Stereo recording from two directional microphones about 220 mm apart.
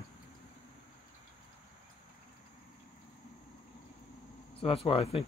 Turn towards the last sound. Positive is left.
turn(degrees=25)  # may be behind; listen again after turning